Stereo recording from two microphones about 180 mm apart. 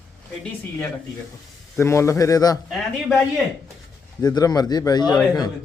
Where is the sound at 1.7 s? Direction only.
15° left (ahead or behind).